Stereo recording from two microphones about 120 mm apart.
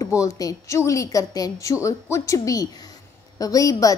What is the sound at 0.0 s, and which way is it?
Speech, 30° left (ahead or behind).